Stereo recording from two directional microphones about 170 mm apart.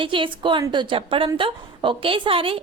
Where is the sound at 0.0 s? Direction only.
30° right (ahead or behind).